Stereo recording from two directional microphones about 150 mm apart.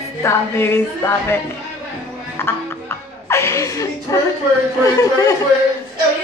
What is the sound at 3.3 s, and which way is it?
Chuckle, 20° left (ahead or behind).